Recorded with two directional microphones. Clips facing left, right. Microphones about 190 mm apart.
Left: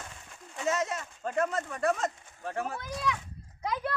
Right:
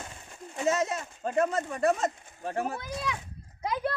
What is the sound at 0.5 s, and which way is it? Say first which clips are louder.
Speech: right 3 dB; 25° right (ahead or behind).